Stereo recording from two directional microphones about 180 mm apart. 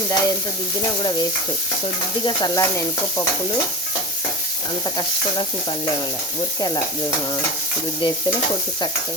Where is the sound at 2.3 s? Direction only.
20° left (ahead or behind).